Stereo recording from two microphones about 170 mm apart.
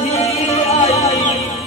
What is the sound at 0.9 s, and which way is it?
Music, 20° left (ahead or behind).